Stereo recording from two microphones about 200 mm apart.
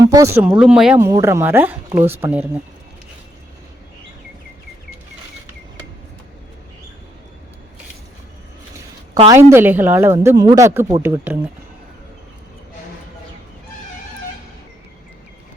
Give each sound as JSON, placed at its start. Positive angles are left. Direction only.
{"t": 0.0, "sound": "a sound", "side_deg": -15}
{"t": 0.4, "sound": "a woman's voice", "side_deg": -5}
{"t": 9.1, "sound": "a woman's voice", "side_deg": -20}